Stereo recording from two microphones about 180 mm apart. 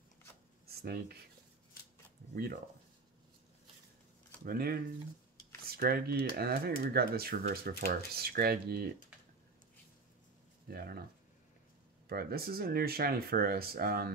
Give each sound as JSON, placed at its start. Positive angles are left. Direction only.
{"t": 0.7, "sound": "writing", "side_deg": -60}
{"t": 4.5, "sound": "speech", "side_deg": -60}
{"t": 10.7, "sound": "speech", "side_deg": -60}
{"t": 12.1, "sound": "speech", "side_deg": -60}